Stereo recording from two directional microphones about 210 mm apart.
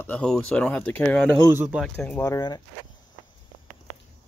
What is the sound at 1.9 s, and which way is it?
Speech, 10° left (ahead or behind).